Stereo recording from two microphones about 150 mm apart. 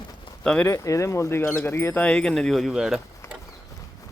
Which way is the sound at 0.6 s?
20° left (ahead or behind).